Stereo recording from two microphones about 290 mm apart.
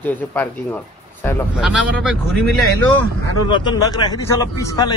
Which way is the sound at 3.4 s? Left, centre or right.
Centre.